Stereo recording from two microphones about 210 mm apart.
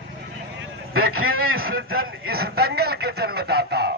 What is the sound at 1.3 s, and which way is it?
Speech, 80° right.